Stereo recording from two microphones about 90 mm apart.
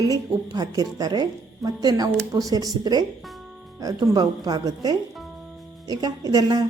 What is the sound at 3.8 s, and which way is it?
A woman's voice, 40° right (ahead or behind).